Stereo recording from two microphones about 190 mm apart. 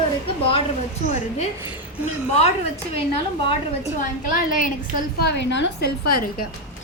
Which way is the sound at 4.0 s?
45° left (ahead or behind).